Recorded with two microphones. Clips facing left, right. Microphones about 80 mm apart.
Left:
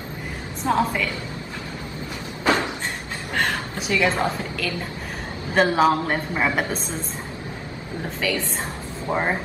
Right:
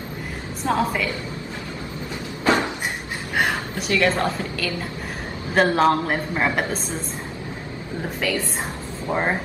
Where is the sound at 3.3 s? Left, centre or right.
Centre.